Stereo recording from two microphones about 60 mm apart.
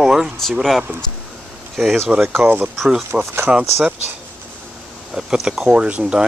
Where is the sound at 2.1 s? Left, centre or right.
Right.